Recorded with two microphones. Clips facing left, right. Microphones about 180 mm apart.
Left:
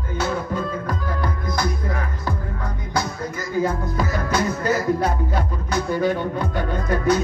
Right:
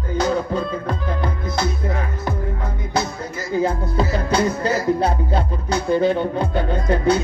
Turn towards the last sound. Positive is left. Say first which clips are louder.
# right 2 dB
turn(degrees=-25)  # may be behind; listen again after turning